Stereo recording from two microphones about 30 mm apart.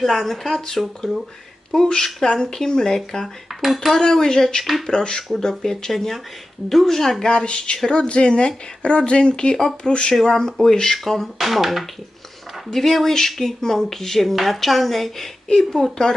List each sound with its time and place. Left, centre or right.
0.0 s a woman's voice: centre
1.7 s speech: centre
3.5 s cutlery: centre
4.1 s speech: centre
5.9 s speech: centre
7.3 s speech: left
10.6 s speech: centre
11.3 s a woman's voice: centre
12.7 s a woman's voice: centre
15.7 s speech: centre